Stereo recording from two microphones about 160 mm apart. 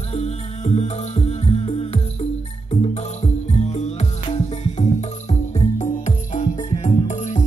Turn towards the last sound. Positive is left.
turn(degrees=50)  # may be behind; listen again after turning